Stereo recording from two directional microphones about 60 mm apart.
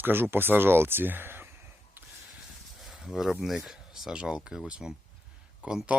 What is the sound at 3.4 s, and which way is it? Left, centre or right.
Speech, centre.